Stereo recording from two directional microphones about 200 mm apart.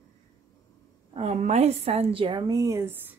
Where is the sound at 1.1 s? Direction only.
30° right (ahead or behind); by 3.2 s 10° right (ahead or behind).